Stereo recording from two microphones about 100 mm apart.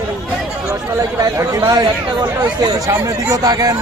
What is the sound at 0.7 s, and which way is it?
Speech, 35° right (ahead or behind).